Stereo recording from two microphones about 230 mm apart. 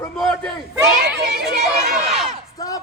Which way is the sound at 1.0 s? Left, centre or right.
Right.